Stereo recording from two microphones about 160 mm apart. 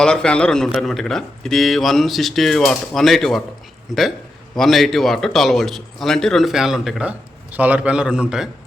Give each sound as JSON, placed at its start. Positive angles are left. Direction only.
{"t": 0.0, "sound": "speech", "side_deg": 5}